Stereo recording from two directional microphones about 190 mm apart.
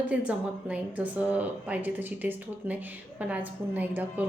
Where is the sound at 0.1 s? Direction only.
5° right (ahead or behind).